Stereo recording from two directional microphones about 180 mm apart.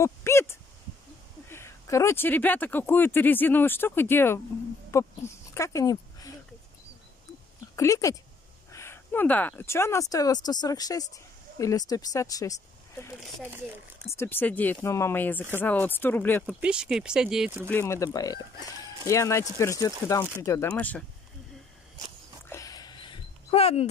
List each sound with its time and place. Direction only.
0.0 s speech: 15° left (ahead or behind)
4.9 s a sound: 15° left (ahead or behind)
7.7 s speech: 15° left (ahead or behind)
14.1 s speech: 10° left (ahead or behind)
16.5 s speech: 5° right (ahead or behind)
17.6 s speech: 15° left (ahead or behind)
22.5 s a sound: 20° left (ahead or behind)